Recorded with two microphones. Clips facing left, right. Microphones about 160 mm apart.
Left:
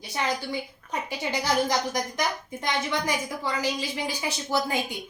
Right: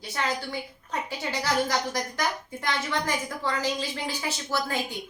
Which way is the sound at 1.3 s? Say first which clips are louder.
Left 2 dB; 15° left (ahead or behind).